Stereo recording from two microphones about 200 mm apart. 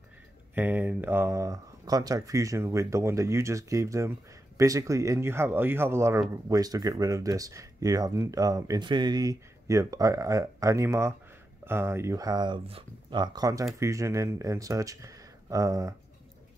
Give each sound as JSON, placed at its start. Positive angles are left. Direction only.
{"t": 0.6, "sound": "speech", "side_deg": -10}